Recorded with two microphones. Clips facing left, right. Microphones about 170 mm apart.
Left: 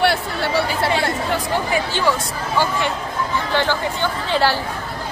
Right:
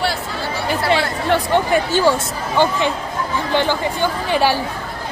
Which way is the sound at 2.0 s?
20° right (ahead or behind).